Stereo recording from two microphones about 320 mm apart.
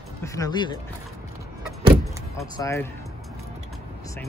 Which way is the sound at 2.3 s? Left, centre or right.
Centre.